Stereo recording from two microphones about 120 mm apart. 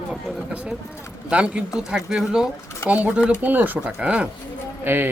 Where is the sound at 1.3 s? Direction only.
10° right (ahead or behind).